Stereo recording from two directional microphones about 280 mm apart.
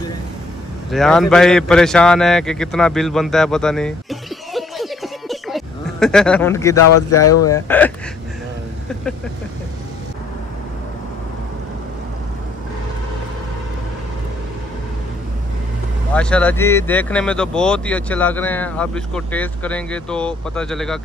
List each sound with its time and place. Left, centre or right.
0.8 s a man's voice: centre
7.2 s speech: left
7.4 s speech: centre
16.1 s speech: centre